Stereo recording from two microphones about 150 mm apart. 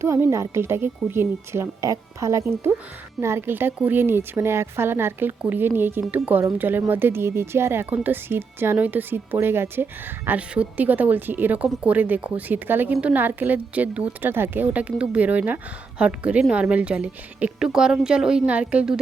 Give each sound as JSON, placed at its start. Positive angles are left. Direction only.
{"t": 0.0, "sound": "a woman's voice", "side_deg": -20}